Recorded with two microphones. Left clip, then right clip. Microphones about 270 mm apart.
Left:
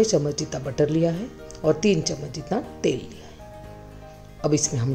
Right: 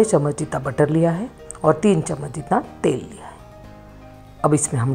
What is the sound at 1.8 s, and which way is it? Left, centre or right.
Speech, right.